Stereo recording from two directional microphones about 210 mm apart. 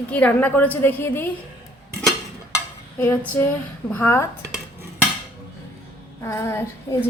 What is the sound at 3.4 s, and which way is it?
Speech, 10° left (ahead or behind).